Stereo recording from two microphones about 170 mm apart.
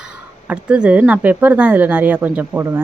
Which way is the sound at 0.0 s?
5° right (ahead or behind).